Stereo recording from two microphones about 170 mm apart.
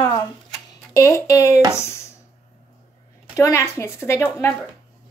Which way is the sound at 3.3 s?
15° left (ahead or behind).